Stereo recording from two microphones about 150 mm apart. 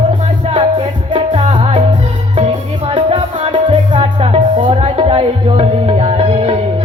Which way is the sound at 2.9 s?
40° right (ahead or behind).